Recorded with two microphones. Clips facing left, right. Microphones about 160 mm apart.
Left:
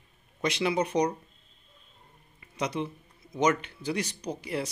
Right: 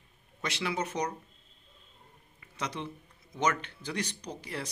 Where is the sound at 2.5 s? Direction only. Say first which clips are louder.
Left 6 dB; 10° left (ahead or behind).